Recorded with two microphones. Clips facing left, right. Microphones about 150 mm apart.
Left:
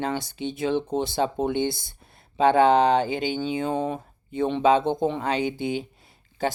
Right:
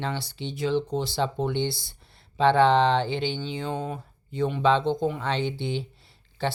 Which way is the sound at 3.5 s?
50° left (ahead or behind).